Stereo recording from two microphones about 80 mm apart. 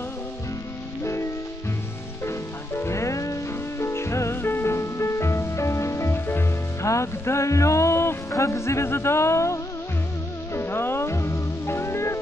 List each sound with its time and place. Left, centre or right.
1.0 s music: left